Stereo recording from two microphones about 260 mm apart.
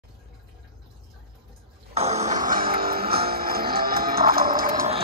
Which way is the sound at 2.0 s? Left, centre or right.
Right.